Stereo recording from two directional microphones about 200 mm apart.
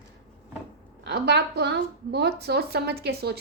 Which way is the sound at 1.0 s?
55° right (ahead or behind).